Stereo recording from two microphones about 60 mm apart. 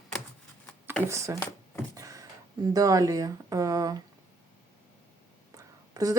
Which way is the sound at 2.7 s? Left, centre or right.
Right.